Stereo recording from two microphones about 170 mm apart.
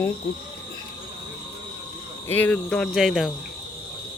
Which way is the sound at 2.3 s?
10° left (ahead or behind).